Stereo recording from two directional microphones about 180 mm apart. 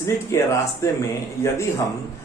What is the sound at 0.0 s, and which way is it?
Speech, 15° left (ahead or behind).